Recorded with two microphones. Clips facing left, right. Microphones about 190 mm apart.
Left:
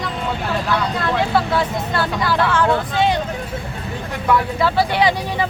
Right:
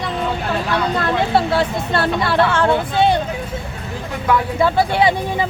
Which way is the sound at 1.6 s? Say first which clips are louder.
Right 2 dB; 65° right (ahead or behind).